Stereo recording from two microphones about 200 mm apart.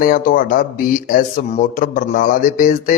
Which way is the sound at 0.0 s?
40° left (ahead or behind).